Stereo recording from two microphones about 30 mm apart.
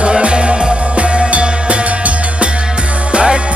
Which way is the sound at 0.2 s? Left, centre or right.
Right.